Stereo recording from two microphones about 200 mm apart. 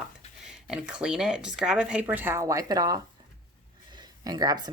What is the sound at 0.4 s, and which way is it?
Speech, 5° right (ahead or behind).